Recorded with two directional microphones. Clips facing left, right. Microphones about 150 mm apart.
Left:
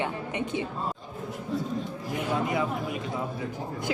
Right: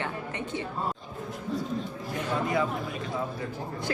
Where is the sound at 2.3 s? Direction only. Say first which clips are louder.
Even; 20° left (ahead or behind).